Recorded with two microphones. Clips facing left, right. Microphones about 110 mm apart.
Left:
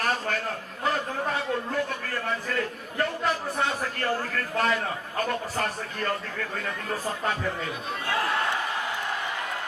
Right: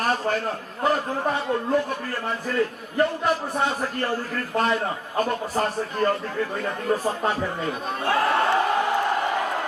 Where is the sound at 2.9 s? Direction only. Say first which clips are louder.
Right 5 dB; 25° right (ahead or behind).